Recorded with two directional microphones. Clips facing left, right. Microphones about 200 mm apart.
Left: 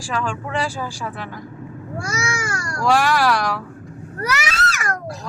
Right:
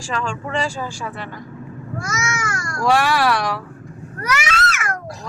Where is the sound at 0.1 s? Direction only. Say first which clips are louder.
Even; 5° left (ahead or behind).